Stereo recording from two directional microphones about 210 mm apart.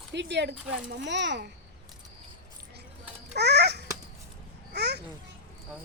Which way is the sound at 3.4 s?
50° right (ahead or behind).